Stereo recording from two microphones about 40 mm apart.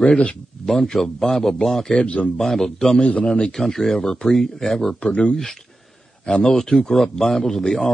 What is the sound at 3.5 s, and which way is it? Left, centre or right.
Speech, centre.